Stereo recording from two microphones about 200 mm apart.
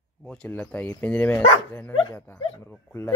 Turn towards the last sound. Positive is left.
turn(degrees=10)  # may be behind; listen again after turning